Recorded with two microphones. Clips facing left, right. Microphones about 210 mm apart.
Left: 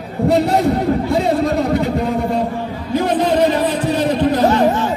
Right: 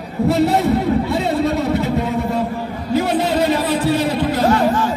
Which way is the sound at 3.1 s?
10° right (ahead or behind).